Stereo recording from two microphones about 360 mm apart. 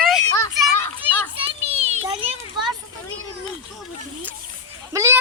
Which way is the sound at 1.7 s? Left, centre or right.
Centre.